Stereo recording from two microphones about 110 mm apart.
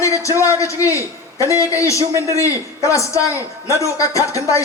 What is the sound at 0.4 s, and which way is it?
A man's voice, 30° left (ahead or behind).